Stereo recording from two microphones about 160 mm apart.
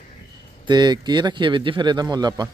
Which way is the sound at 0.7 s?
25° right (ahead or behind).